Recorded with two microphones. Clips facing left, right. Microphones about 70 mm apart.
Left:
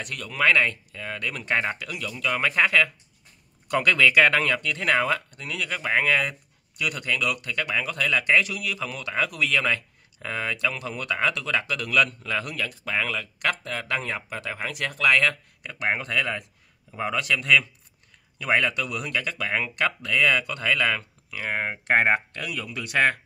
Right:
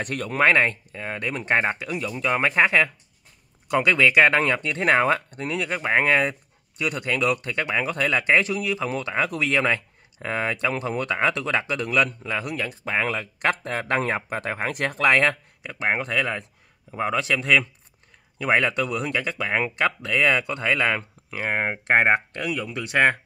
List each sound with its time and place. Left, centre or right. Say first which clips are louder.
0.0 s speech: right 3 dB; right
15.6 s speech: right 2 dB; centre